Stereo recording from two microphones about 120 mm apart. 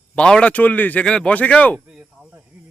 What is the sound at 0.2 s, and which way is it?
Speech, 10° left (ahead or behind).